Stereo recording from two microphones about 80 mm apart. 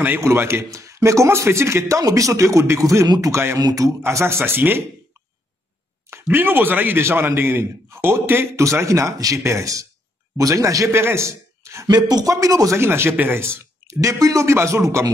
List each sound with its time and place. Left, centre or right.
0.2 s a man's voice: right
3.5 s speech: right
4.0 s a man's voice: right
6.3 s a man's voice: right
11.9 s speech: right
12.7 s a man's voice: right